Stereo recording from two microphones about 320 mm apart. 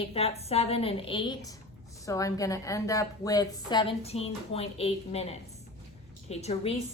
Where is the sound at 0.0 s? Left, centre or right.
Centre.